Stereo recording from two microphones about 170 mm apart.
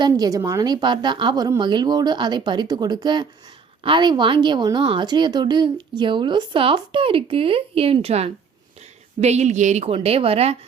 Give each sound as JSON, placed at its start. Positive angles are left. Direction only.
{"t": 0.0, "sound": "a woman's voice", "side_deg": -20}